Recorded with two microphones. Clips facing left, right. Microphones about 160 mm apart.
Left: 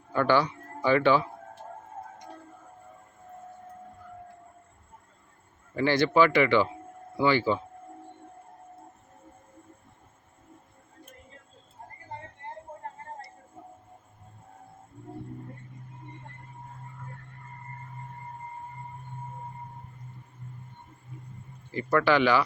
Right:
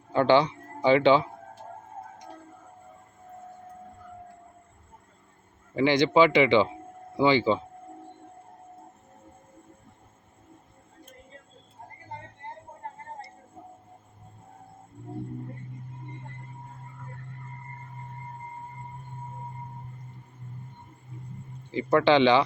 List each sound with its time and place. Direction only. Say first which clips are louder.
0.1 s speech: right 3 dB; 20° right (ahead or behind)
5.7 s speech: right 2 dB; 20° right (ahead or behind)
21.7 s speech: right 3 dB; 20° right (ahead or behind)